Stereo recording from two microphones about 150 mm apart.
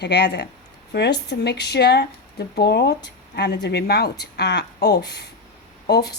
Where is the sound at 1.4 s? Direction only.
90° left.